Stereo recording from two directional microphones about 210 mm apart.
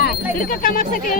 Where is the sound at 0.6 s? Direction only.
40° left (ahead or behind).